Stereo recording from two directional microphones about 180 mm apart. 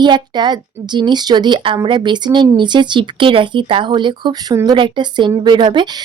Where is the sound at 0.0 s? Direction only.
25° right (ahead or behind).